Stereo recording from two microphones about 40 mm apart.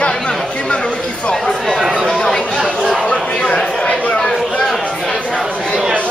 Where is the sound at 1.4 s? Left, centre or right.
Centre.